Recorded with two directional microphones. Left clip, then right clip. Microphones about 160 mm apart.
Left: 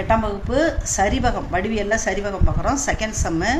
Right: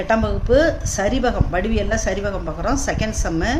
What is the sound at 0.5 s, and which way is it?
Speech, 45° right (ahead or behind).